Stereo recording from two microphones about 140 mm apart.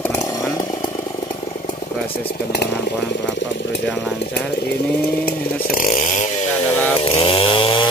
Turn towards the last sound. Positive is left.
turn(degrees=35)  # may be behind; listen again after turning